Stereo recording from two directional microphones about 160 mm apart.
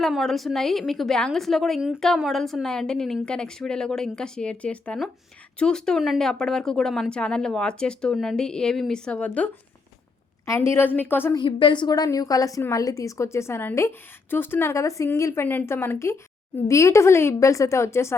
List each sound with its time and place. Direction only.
0.0 s a woman's voice: centre (ahead or behind)
11.3 s a woman's voice: 30° left (ahead or behind)